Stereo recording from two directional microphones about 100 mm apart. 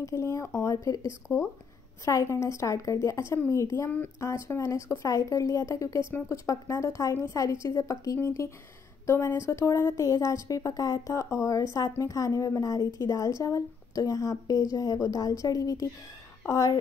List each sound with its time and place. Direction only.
0.0 s speech: 30° left (ahead or behind)